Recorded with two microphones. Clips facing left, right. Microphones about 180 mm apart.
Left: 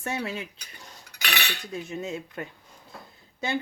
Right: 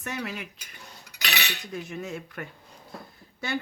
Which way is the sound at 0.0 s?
30° left (ahead or behind).